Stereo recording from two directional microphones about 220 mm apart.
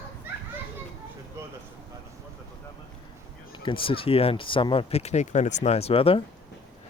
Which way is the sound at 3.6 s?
25° left (ahead or behind).